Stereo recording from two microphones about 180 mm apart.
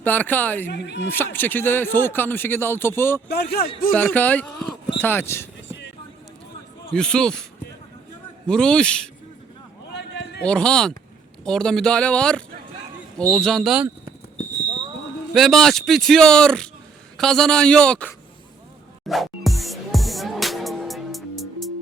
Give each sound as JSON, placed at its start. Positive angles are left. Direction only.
{"t": 0.0, "sound": "speech", "side_deg": 10}
{"t": 0.7, "sound": "speech", "side_deg": 70}
{"t": 1.1, "sound": "speech", "side_deg": 10}
{"t": 3.2, "sound": "speech", "side_deg": 65}
{"t": 3.9, "sound": "speech", "side_deg": 10}
{"t": 6.9, "sound": "a man's voice", "side_deg": 5}
{"t": 8.4, "sound": "a man's voice", "side_deg": 5}
{"t": 9.9, "sound": "a sound", "side_deg": 70}
{"t": 10.4, "sound": "a man's voice", "side_deg": 5}
{"t": 15.3, "sound": "a man's voice", "side_deg": 0}
{"t": 19.0, "sound": "music", "side_deg": 0}